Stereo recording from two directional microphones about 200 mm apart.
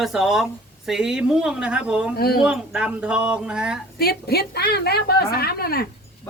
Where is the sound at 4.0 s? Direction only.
50° left (ahead or behind).